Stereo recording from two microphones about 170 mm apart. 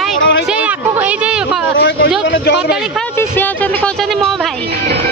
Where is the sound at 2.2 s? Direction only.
90° left.